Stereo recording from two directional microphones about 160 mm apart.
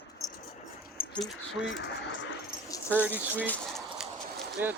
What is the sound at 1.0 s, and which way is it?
Speech, 5° left (ahead or behind).